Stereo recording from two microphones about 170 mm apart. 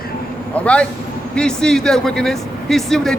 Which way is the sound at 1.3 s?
5° left (ahead or behind).